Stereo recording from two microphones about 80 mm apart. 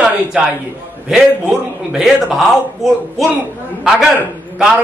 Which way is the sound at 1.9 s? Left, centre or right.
Centre.